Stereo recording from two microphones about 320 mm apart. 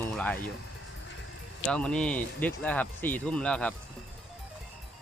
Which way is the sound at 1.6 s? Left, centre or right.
Centre.